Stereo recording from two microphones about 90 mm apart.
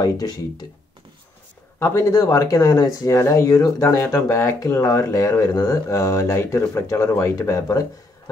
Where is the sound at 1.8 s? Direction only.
30° left (ahead or behind).